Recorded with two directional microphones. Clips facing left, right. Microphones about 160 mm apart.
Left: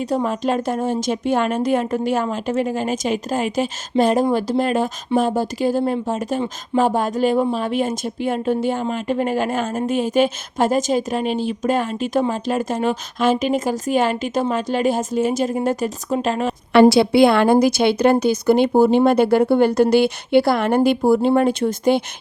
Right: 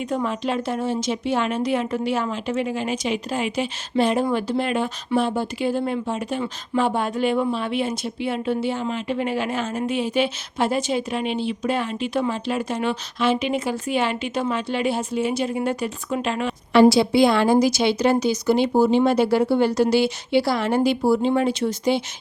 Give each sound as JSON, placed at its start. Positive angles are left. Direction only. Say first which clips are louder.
{"t": 0.0, "sound": "speech", "louder": "left 4 dB", "side_deg": 35}
{"t": 16.9, "sound": "speech", "louder": "left 4 dB", "side_deg": 65}